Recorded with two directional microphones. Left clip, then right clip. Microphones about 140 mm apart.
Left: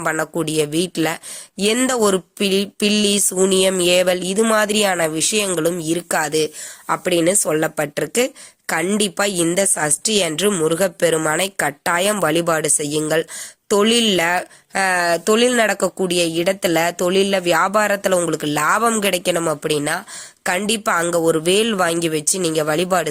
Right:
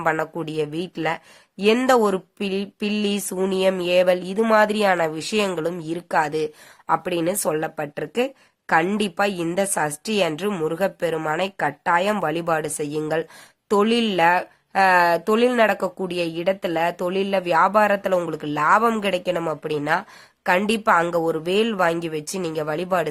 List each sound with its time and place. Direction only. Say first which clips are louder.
0.0 s speech: left 2 dB; 25° left (ahead or behind)